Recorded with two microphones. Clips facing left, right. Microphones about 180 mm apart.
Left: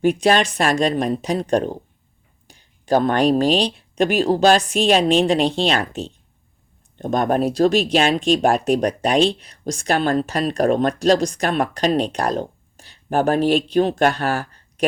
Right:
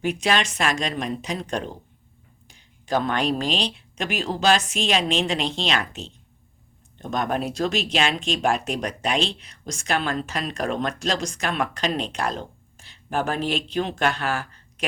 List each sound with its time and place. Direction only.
0.0 s speech: 35° left (ahead or behind)